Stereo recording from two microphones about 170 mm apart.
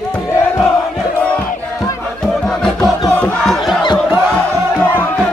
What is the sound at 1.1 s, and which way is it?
Battle cry, 5° left (ahead or behind).